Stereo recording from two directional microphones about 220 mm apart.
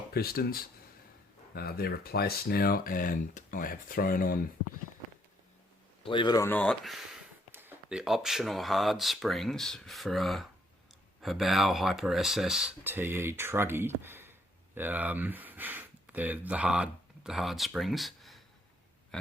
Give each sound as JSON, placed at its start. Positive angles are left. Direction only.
{"t": 0.1, "sound": "speech", "side_deg": 45}
{"t": 6.0, "sound": "speech", "side_deg": 20}
{"t": 19.1, "sound": "a sound", "side_deg": 0}